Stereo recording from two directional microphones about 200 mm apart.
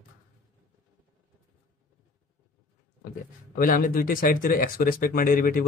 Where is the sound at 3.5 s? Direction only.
45° left (ahead or behind).